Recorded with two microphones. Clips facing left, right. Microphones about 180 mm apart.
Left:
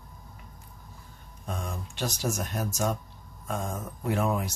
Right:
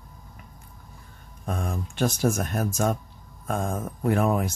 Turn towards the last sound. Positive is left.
turn(degrees=-55)  # may be behind; listen again after turning